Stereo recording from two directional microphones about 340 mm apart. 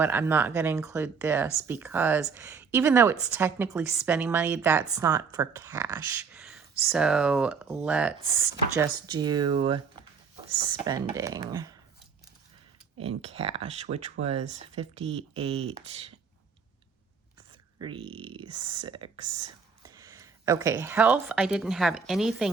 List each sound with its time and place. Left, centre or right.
0.0 s a woman's voice: centre
13.0 s speech: centre
17.7 s speech: centre